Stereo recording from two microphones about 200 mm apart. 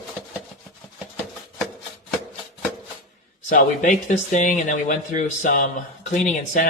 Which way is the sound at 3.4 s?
40° left (ahead or behind).